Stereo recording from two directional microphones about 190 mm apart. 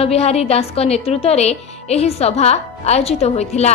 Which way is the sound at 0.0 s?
35° left (ahead or behind).